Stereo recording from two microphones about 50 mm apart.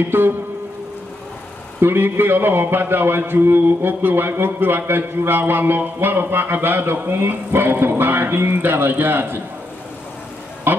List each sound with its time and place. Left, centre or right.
0.1 s a man's voice: right
1.8 s a man's voice: right